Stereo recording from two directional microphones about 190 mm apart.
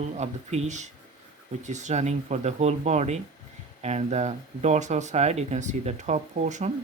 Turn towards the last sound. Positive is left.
turn(degrees=-40)  # may be behind; listen again after turning